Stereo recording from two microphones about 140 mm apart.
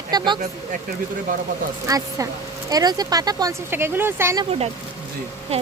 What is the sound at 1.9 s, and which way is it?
Speech, 25° right (ahead or behind).